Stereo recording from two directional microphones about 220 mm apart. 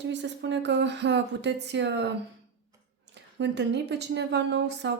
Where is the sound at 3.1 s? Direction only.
50° right (ahead or behind).